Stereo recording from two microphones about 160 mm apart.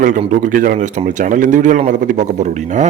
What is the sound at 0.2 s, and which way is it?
Speech, 50° right (ahead or behind).